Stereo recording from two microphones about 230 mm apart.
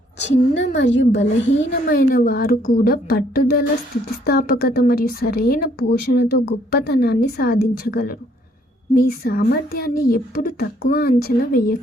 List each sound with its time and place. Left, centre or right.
0.6 s a woman's voice: left
1.5 s a woman's voice: left